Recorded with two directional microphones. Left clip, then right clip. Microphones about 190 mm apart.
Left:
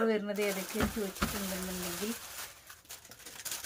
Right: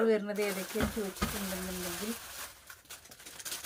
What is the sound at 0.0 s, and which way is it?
Speech, 5° left (ahead or behind).